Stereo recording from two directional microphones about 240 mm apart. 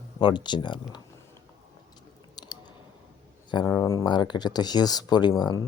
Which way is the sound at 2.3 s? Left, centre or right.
Centre.